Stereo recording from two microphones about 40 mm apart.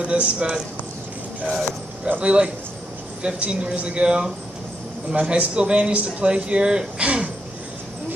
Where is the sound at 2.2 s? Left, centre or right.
Right.